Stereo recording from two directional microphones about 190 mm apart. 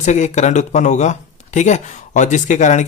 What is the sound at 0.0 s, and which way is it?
Speech, 40° left (ahead or behind).